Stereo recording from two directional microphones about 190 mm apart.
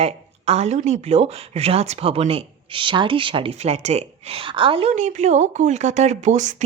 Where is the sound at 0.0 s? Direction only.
35° right (ahead or behind).